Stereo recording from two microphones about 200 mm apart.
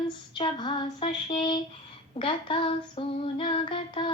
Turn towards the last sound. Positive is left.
turn(degrees=25)  # may be behind; listen again after turning